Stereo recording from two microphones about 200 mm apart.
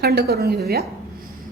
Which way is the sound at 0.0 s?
50° right (ahead or behind).